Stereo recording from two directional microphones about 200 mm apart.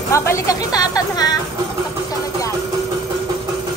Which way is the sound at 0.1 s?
15° left (ahead or behind).